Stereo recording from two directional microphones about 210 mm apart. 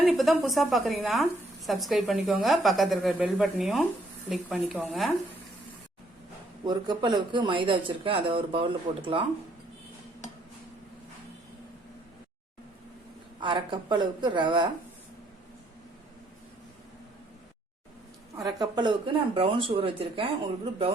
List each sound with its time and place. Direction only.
0.0 s speech: centre (ahead or behind)
6.7 s speech: 20° right (ahead or behind)
13.4 s speech: 20° right (ahead or behind)
18.3 s speech: 20° right (ahead or behind)